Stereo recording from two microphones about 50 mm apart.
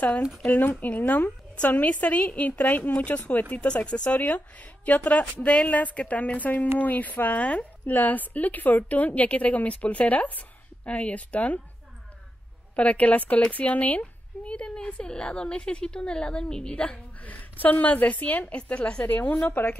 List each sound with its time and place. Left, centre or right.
0.5 s a woman's voice: left
3.6 s a woman's voice: left
12.7 s a woman's voice: left